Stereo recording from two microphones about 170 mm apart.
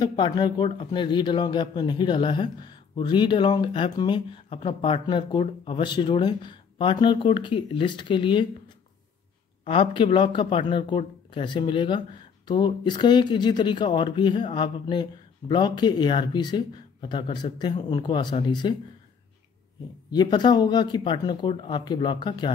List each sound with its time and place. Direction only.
0.0 s speech: 25° left (ahead or behind)
20.1 s speech: 25° left (ahead or behind)